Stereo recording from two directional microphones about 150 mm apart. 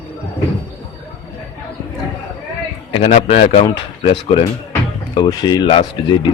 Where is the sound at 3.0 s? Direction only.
50° left (ahead or behind).